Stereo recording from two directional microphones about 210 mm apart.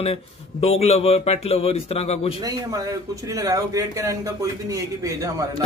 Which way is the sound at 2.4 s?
15° right (ahead or behind).